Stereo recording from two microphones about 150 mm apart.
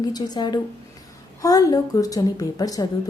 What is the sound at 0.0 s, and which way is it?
A woman's voice, 25° left (ahead or behind).